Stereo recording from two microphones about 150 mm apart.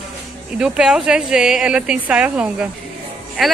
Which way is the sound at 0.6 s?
5° right (ahead or behind).